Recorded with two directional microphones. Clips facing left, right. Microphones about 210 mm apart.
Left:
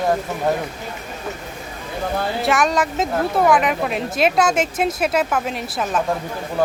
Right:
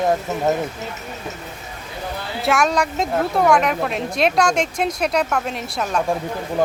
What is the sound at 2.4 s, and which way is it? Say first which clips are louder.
Speech: right 2 dB; centre (ahead or behind).